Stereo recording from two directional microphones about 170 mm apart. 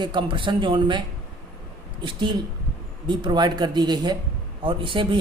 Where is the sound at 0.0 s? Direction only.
25° right (ahead or behind).